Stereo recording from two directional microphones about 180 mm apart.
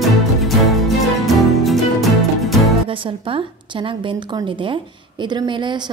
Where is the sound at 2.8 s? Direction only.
30° right (ahead or behind).